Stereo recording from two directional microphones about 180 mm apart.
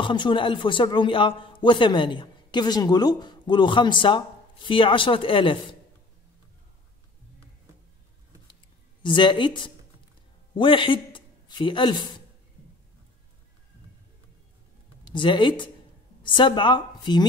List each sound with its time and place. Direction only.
0.0 s a man's voice: 25° left (ahead or behind)
9.0 s a man's voice: 25° left (ahead or behind)
15.0 s a man's voice: 25° left (ahead or behind)